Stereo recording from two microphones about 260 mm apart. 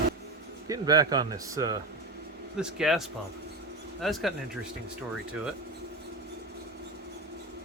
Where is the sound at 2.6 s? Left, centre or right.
Centre.